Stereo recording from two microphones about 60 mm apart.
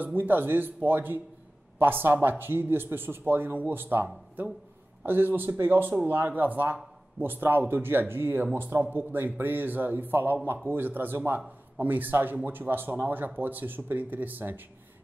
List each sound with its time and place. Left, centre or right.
0.0 s speech: right